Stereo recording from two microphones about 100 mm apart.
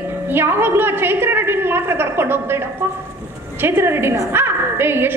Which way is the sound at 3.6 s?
25° right (ahead or behind).